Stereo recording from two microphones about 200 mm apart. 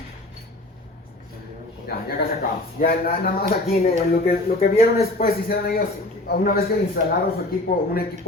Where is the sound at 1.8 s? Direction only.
50° left (ahead or behind).